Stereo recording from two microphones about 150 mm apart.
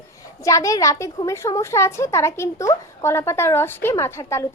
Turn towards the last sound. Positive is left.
turn(degrees=15)  # may be behind; listen again after turning